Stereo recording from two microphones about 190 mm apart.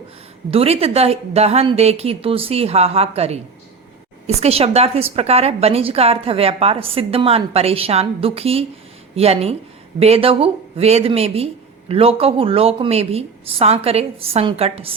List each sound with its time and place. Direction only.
0.5 s a woman's voice: 30° right (ahead or behind)